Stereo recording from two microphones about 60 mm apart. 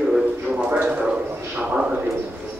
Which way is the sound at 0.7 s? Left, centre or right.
Right.